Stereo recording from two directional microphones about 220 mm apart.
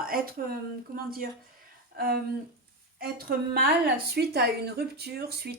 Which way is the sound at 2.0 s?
45° right (ahead or behind).